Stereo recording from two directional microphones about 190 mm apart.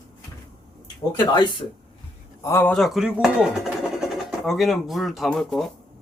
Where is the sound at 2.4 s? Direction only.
10° left (ahead or behind).